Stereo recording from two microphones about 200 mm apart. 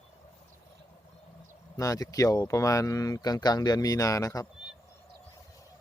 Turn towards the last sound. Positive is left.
turn(degrees=15)  # may be behind; listen again after turning